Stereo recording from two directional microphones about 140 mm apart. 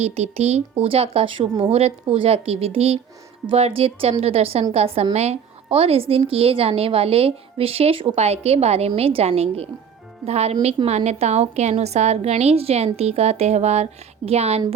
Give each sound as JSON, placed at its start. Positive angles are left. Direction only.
{"t": 0.0, "sound": "a woman's voice", "side_deg": -50}
{"t": 1.7, "sound": "a woman's voice", "side_deg": -45}